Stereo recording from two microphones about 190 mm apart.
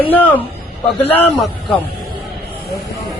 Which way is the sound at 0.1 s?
10° left (ahead or behind).